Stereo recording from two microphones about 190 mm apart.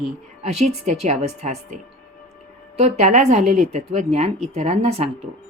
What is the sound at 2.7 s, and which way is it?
Speech, 35° right (ahead or behind).